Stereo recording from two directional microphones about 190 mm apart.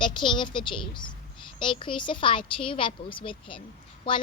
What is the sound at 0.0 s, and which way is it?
Speech, 25° left (ahead or behind).